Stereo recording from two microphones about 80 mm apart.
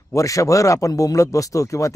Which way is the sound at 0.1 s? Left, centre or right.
Left.